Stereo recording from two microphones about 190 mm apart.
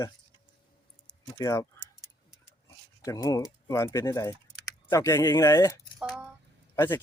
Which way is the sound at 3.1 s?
20° left (ahead or behind).